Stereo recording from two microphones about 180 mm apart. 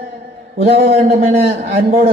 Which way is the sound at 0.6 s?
40° right (ahead or behind).